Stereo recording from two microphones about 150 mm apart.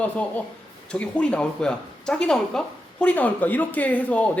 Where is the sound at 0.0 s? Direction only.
10° left (ahead or behind).